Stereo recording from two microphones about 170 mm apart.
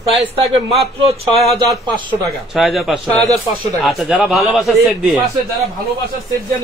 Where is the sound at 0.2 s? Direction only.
35° right (ahead or behind).